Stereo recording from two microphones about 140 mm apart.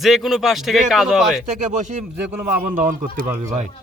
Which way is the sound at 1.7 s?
65° right (ahead or behind).